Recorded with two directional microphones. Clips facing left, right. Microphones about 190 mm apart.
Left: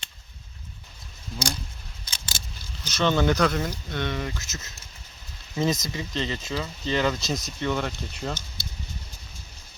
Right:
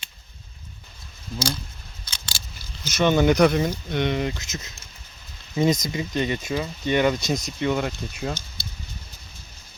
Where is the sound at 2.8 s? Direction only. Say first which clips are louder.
Right 4 dB; 10° right (ahead or behind).